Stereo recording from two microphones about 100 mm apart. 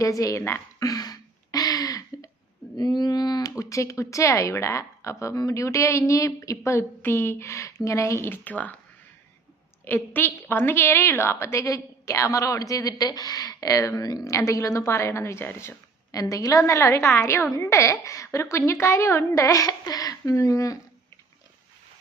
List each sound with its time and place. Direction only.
0.0 s speech: 35° left (ahead or behind)
0.9 s a sound: 35° left (ahead or behind)
2.7 s a woman's voice: 40° left (ahead or behind); by 8.7 s 15° left (ahead or behind)
9.8 s a woman's voice: 20° left (ahead or behind)